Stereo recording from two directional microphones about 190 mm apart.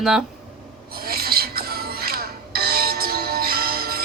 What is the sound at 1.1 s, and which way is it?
Music, 55° right (ahead or behind).